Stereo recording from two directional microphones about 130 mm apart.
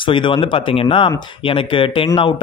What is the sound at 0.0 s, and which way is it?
A man's voice, 40° left (ahead or behind).